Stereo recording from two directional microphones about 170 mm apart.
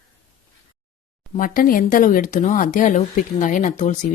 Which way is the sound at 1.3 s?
55° left (ahead or behind).